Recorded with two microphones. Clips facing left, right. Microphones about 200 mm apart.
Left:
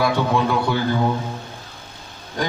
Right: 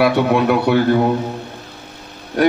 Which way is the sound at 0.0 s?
65° right (ahead or behind).